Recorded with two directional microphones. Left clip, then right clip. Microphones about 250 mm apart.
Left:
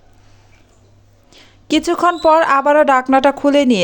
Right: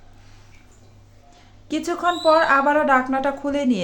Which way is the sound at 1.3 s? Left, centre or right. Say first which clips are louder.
Left 10 dB; left.